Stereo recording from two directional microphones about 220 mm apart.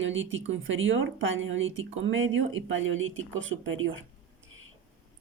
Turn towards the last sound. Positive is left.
turn(degrees=-60)  # may be behind; listen again after turning